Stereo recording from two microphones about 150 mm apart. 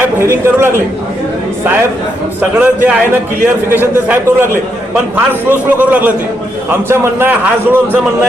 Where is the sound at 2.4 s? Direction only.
10° right (ahead or behind).